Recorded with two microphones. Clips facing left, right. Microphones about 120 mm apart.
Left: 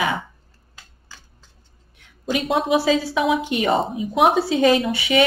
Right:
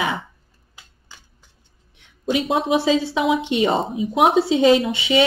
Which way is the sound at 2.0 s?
25° right (ahead or behind).